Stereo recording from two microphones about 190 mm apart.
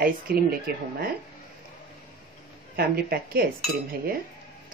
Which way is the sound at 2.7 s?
55° right (ahead or behind).